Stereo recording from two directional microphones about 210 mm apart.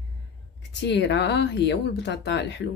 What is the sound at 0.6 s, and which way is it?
Speech, 55° left (ahead or behind).